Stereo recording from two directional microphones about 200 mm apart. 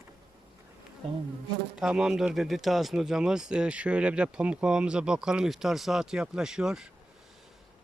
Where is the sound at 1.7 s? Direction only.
5° right (ahead or behind).